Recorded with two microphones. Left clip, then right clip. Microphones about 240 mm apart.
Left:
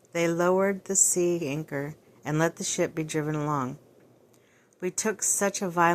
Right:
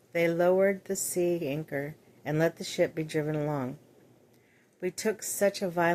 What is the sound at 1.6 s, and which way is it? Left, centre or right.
Speech, left.